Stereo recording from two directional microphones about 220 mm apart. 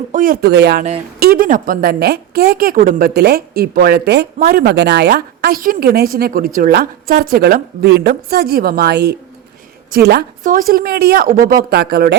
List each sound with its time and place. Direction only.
0.1 s a woman's voice: 40° right (ahead or behind)